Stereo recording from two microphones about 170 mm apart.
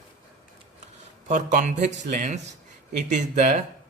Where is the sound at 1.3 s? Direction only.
45° right (ahead or behind).